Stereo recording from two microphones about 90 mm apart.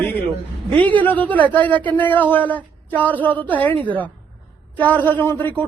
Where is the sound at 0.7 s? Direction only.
20° left (ahead or behind).